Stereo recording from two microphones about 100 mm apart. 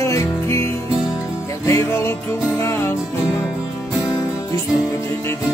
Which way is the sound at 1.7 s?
30° left (ahead or behind).